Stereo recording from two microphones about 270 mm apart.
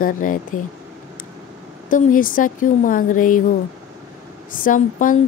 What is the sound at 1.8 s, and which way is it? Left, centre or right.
A woman's voice, left.